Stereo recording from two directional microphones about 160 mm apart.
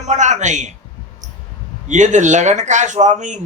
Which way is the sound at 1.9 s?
50° right (ahead or behind).